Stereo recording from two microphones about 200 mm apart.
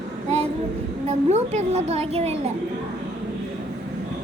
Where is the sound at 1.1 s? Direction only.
35° right (ahead or behind).